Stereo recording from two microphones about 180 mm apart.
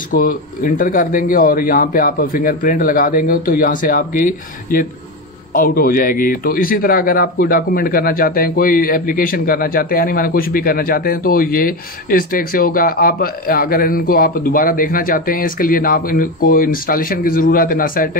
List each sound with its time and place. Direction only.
0.1 s a man's voice: 50° left (ahead or behind)